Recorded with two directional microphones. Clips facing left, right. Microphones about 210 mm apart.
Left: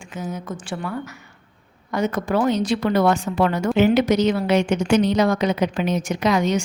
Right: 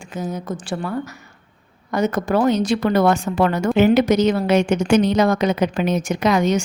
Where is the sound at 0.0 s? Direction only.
40° right (ahead or behind).